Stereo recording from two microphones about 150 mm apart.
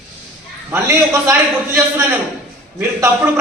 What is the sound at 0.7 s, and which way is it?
Speech, 15° right (ahead or behind).